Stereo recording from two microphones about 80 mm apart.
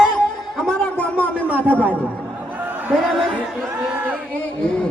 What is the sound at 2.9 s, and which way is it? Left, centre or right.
Speech, centre.